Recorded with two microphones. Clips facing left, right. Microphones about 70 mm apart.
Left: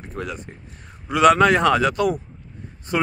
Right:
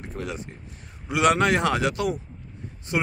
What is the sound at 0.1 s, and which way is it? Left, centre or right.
A man's voice, left.